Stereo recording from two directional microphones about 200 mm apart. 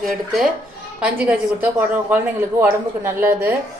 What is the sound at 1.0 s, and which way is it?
A woman's voice, 5° right (ahead or behind).